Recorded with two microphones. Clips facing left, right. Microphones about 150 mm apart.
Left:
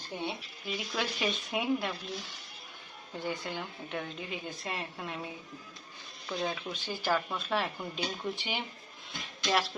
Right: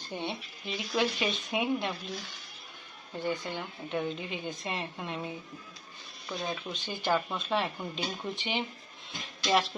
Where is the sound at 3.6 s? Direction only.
10° right (ahead or behind).